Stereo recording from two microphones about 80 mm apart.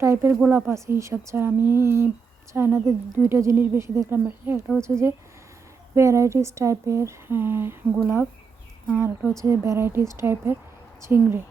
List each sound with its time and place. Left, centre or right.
0.0 s speech: right
8.9 s speech: right